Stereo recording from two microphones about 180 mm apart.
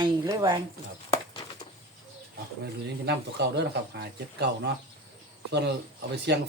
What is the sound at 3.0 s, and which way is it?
Speech, 65° right (ahead or behind).